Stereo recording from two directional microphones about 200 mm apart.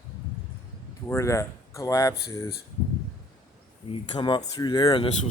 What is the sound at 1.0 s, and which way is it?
Speech, 15° left (ahead or behind).